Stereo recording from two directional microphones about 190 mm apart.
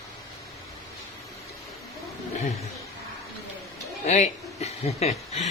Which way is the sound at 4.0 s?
35° left (ahead or behind).